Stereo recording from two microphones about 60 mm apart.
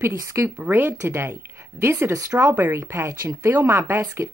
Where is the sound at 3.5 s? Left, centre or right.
Right.